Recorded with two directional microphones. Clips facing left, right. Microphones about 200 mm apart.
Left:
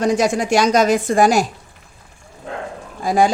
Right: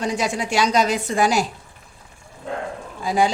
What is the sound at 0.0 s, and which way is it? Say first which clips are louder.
Speech: left 7 dB; 45° left (ahead or behind).